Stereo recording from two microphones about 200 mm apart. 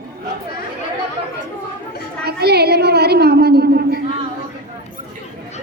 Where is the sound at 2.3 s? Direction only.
55° right (ahead or behind).